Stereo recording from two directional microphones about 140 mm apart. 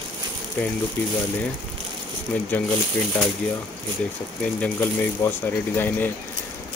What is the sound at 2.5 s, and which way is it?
Speech, 10° left (ahead or behind).